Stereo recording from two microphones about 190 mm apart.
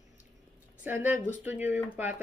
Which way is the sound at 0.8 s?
10° right (ahead or behind).